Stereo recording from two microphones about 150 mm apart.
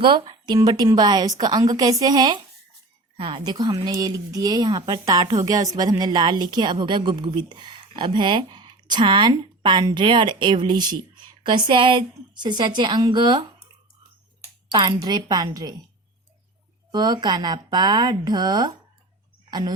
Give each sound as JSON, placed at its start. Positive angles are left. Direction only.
{"t": 0.0, "sound": "speech", "side_deg": -35}
{"t": 14.7, "sound": "speech", "side_deg": -30}
{"t": 16.9, "sound": "speech", "side_deg": -30}